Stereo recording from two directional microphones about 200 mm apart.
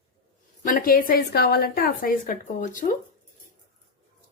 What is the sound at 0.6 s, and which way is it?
Speech, 45° left (ahead or behind).